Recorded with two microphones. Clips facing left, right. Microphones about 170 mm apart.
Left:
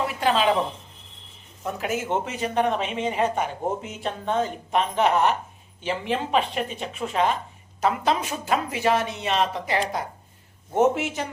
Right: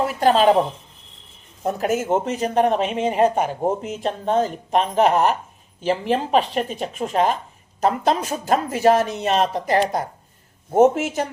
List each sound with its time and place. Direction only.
0.0 s a woman's voice: 45° right (ahead or behind)
1.6 s a woman's voice: 45° right (ahead or behind)